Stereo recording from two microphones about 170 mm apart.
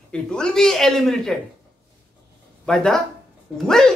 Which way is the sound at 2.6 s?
5° left (ahead or behind).